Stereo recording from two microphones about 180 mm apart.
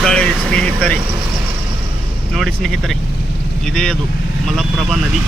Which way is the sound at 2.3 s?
Centre (ahead or behind).